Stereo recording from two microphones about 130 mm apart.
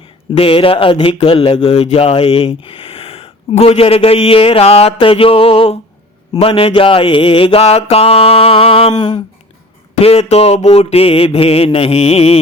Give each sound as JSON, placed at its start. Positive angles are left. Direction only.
{"t": 0.3, "sound": "speech", "side_deg": 45}
{"t": 8.9, "sound": "a sound", "side_deg": 35}
{"t": 10.0, "sound": "speech", "side_deg": 55}